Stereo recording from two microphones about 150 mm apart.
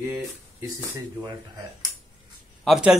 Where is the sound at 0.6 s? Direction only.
15° right (ahead or behind).